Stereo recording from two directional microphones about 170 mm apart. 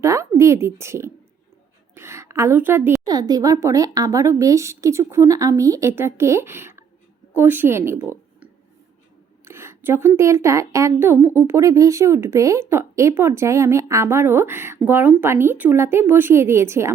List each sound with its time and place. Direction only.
0.0 s a woman's voice: 15° right (ahead or behind)
3.1 s a woman's voice: 25° right (ahead or behind)
8.0 s a sound: 15° right (ahead or behind)
9.4 s speech: 15° right (ahead or behind)